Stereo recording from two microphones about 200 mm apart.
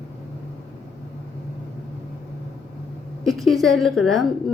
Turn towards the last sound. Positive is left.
turn(degrees=0)  # may be behind; listen again after turning